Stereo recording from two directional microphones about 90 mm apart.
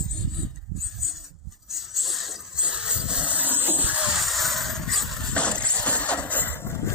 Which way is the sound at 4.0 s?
Centre (ahead or behind).